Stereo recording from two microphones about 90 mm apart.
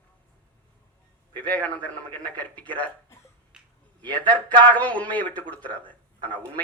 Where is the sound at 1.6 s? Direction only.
15° left (ahead or behind).